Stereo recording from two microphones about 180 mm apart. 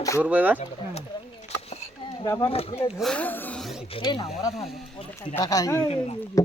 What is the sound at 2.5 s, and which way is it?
Speech, 35° left (ahead or behind).